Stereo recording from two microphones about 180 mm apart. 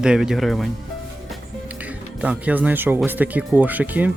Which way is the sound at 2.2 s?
10° right (ahead or behind).